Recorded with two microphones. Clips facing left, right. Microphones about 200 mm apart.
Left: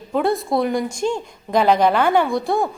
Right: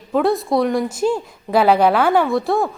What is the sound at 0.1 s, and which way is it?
A woman's voice, centre (ahead or behind).